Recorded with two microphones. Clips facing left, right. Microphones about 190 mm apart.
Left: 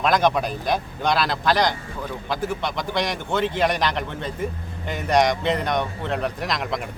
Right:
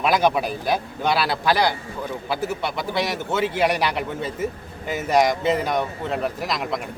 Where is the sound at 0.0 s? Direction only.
10° right (ahead or behind).